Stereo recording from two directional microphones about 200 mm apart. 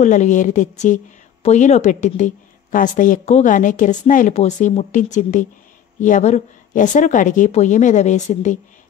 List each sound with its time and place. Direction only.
0.0 s a woman's voice: 40° left (ahead or behind)